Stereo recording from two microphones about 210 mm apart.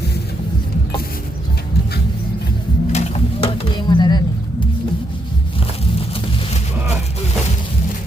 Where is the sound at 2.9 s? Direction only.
30° left (ahead or behind).